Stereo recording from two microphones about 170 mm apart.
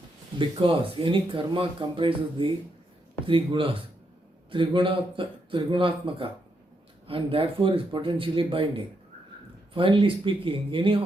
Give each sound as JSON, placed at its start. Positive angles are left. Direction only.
{"t": 0.3, "sound": "speech", "side_deg": -30}